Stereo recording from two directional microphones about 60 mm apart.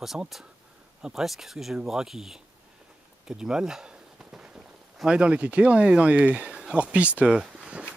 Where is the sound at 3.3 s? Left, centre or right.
Centre.